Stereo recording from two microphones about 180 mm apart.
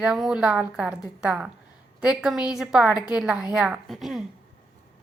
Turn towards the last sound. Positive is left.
turn(degrees=0)  # may be behind; listen again after turning